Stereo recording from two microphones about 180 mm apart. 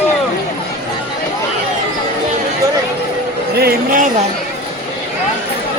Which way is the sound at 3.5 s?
55° right (ahead or behind).